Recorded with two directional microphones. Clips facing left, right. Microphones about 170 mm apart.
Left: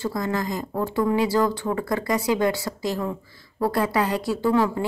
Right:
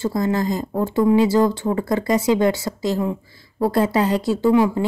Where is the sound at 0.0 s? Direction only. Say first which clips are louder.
Right 5 dB; 25° right (ahead or behind).